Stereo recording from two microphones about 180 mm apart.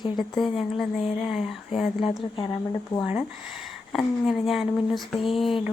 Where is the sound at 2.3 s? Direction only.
20° left (ahead or behind).